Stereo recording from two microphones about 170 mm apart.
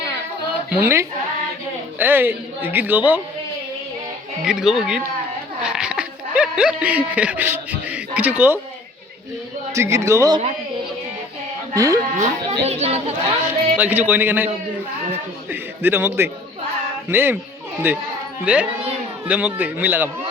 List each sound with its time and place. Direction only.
0.7 s a woman's voice: 10° right (ahead or behind)
4.4 s speech: 5° right (ahead or behind)
9.7 s a woman's voice: 15° right (ahead or behind)
11.7 s speech: 20° right (ahead or behind)
12.1 s speech: 45° right (ahead or behind)
13.5 s a woman's voice: 10° right (ahead or behind)